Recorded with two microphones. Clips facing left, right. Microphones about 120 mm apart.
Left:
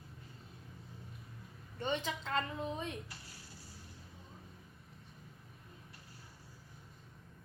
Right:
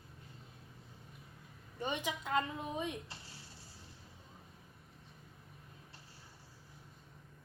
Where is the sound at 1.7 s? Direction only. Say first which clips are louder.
Left 1 dB; 15° right (ahead or behind).